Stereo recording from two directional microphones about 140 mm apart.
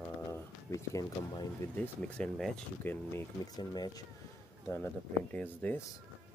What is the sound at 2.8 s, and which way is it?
Speech, 15° left (ahead or behind).